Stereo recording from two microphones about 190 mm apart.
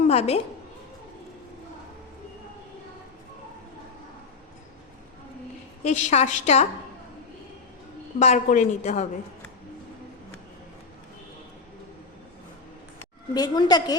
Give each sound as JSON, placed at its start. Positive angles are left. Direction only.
{"t": 0.1, "sound": "a woman's voice", "side_deg": 35}
{"t": 5.8, "sound": "a woman's voice", "side_deg": 40}
{"t": 8.2, "sound": "a woman's voice", "side_deg": 40}
{"t": 13.0, "sound": "a woman's voice", "side_deg": 20}